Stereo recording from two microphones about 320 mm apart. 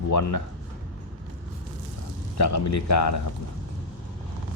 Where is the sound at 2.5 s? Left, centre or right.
Left.